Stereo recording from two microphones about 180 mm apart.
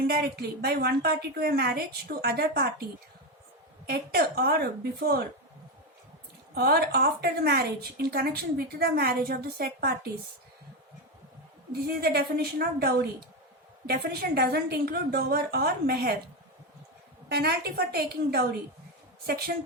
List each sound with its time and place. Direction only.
0.1 s a woman's voice: 60° right (ahead or behind)
3.8 s a woman's voice: 60° right (ahead or behind)
6.5 s a woman's voice: 60° right (ahead or behind)
11.9 s a woman's voice: 60° right (ahead or behind)
17.2 s a woman's voice: 60° right (ahead or behind)